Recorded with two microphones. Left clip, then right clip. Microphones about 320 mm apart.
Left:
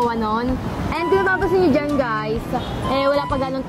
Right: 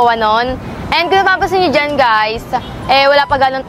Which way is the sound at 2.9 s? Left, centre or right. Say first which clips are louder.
Right 10 dB; right.